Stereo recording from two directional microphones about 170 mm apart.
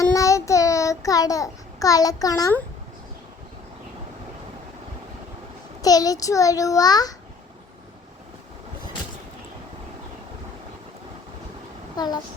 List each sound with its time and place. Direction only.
0.1 s child singing: 20° left (ahead or behind)
5.8 s a child's voice: 20° left (ahead or behind)
11.9 s a child's voice: 25° left (ahead or behind)